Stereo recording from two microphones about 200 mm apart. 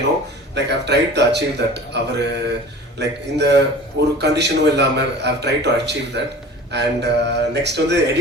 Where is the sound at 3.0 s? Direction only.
60° right (ahead or behind).